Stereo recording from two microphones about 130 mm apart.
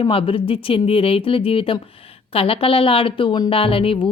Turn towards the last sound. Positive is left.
turn(degrees=45)  # may be behind; listen again after turning